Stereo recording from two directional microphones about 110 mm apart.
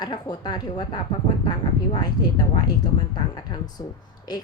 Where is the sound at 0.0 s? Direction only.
40° left (ahead or behind).